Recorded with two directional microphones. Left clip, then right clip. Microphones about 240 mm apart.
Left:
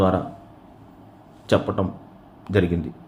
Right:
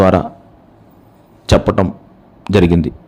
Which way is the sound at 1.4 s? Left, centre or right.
Right.